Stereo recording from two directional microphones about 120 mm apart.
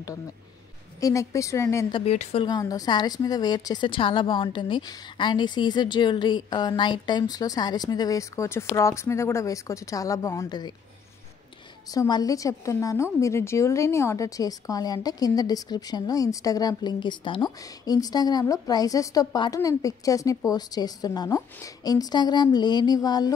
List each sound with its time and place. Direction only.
1.0 s a woman's voice: 25° left (ahead or behind)
1.9 s a woman's voice: 45° left (ahead or behind)
2.4 s a woman's voice: 30° left (ahead or behind)
11.9 s a woman's voice: 30° left (ahead or behind)